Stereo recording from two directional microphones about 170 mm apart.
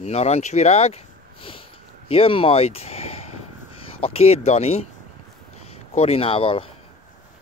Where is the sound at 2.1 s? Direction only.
35° left (ahead or behind).